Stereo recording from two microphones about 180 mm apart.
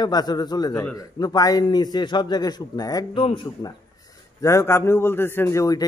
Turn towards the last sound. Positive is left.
turn(degrees=20)  # may be behind; listen again after turning